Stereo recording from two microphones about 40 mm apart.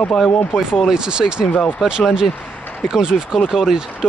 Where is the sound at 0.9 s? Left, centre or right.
Centre.